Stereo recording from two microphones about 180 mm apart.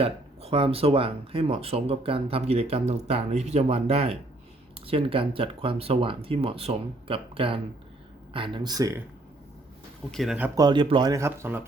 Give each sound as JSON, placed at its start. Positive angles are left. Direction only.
{"t": 0.0, "sound": "speech", "side_deg": -30}
{"t": 10.1, "sound": "speech", "side_deg": 0}
{"t": 10.5, "sound": "speech", "side_deg": -25}